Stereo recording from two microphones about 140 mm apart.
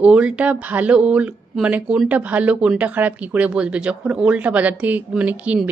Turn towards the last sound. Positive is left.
turn(degrees=-10)  # may be behind; listen again after turning